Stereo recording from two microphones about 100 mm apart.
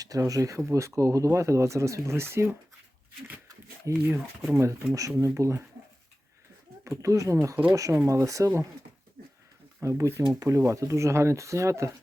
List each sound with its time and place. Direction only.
0.0 s speech: 35° right (ahead or behind)
3.8 s speech: 25° right (ahead or behind)
6.8 s speech: 30° right (ahead or behind)
9.8 s speech: 30° right (ahead or behind)